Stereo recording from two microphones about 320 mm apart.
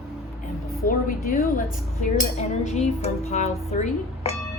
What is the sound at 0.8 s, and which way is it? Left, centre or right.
Speech, left.